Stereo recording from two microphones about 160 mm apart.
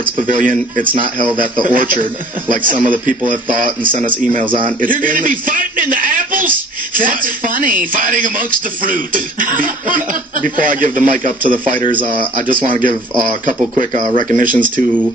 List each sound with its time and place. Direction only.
0.2 s speech: 55° right (ahead or behind)